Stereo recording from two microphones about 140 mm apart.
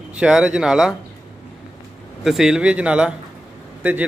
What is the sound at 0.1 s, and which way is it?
Speech, 5° right (ahead or behind).